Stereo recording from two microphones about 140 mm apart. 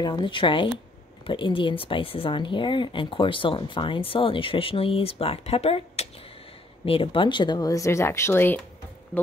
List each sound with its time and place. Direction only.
0.0 s speech: 35° left (ahead or behind); by 8.5 s 15° left (ahead or behind)